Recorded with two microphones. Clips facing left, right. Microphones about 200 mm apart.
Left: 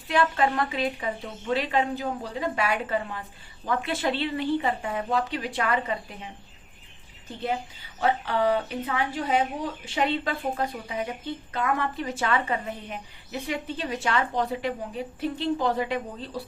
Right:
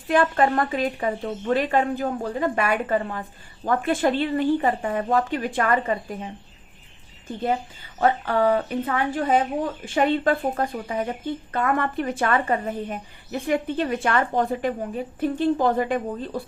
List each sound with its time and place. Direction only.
0.1 s a woman's voice: 45° right (ahead or behind)
7.9 s a woman's voice: 50° right (ahead or behind)